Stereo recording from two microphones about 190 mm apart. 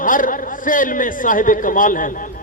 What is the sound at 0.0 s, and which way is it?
A man's voice, 45° left (ahead or behind).